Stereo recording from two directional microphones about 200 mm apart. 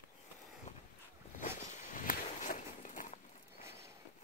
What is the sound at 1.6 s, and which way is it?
Walk, 40° left (ahead or behind).